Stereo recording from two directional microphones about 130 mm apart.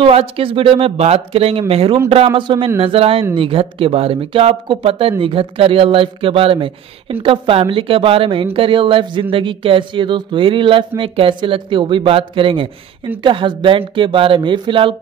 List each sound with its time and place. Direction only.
0.0 s a man's voice: 45° right (ahead or behind)